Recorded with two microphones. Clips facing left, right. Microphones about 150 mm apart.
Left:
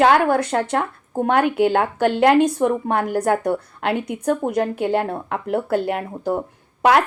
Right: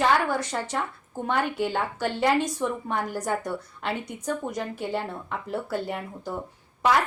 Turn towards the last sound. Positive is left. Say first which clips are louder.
# left 7 dB
turn(degrees=65)  # may be behind; listen again after turning